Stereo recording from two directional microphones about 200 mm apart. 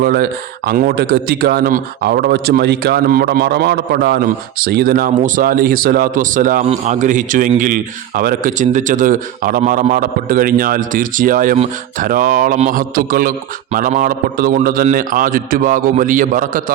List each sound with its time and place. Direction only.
0.0 s a man's voice: 50° right (ahead or behind)
11.5 s speech: 30° right (ahead or behind)
12.0 s a man's voice: 45° right (ahead or behind)